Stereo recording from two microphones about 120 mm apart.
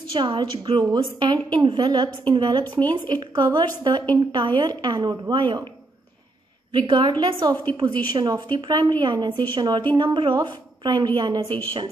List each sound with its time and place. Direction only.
0.1 s speech: 40° right (ahead or behind)
6.7 s speech: 40° right (ahead or behind)